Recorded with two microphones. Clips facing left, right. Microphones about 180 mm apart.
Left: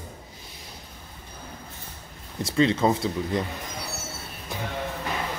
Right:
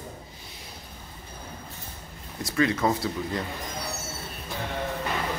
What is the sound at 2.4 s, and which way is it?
Speech, 25° left (ahead or behind).